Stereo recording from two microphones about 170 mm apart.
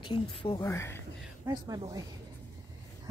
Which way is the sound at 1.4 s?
20° right (ahead or behind).